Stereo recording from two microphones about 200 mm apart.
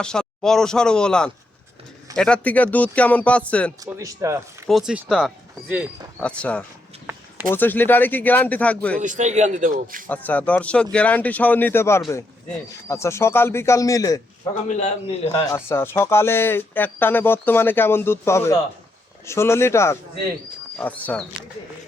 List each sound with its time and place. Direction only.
0.0 s speech: 5° left (ahead or behind)
3.8 s speech: 15° right (ahead or behind)
4.7 s speech: 5° right (ahead or behind)
6.1 s speech: 5° left (ahead or behind)
9.0 s a man's voice: 40° right (ahead or behind)
10.1 s speech: 10° left (ahead or behind)
14.7 s a man's voice: 35° left (ahead or behind)
15.5 s speech: 10° left (ahead or behind)